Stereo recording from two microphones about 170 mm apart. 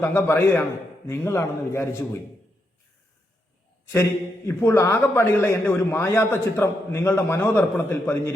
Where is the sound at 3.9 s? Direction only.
15° left (ahead or behind).